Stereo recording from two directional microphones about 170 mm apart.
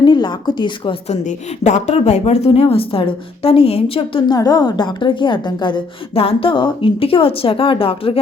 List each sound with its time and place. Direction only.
0.0 s a woman's voice: 30° left (ahead or behind)
1.0 s a woman's voice: 45° left (ahead or behind)